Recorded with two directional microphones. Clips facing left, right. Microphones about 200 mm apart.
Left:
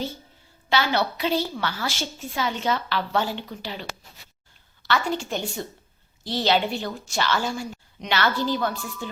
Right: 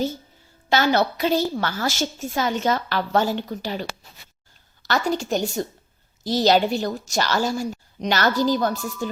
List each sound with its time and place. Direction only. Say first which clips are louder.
0.7 s a woman's voice: right 4 dB; 45° right (ahead or behind)